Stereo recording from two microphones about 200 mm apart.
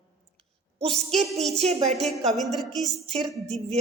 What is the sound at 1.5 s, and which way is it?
Speech, 30° right (ahead or behind).